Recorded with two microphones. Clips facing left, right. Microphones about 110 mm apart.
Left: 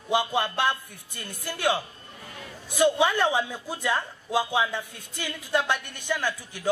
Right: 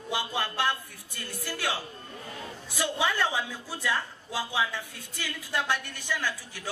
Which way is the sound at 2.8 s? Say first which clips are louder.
Left 7 dB; 20° left (ahead or behind).